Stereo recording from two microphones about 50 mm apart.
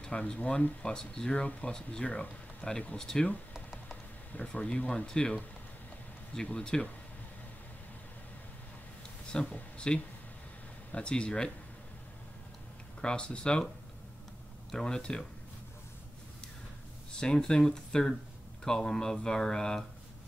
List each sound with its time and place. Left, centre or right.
0.0 s speech: centre
0.8 s speech: centre
4.3 s speech: left
9.5 s speech: left
13.0 s speech: centre
14.7 s speech: centre
17.1 s speech: centre